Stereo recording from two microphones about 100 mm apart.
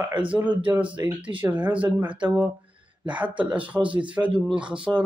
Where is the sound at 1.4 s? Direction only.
15° right (ahead or behind).